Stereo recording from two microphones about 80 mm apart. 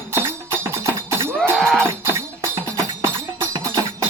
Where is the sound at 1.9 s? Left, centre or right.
Right.